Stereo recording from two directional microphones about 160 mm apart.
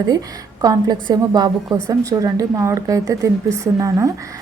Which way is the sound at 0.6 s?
25° right (ahead or behind).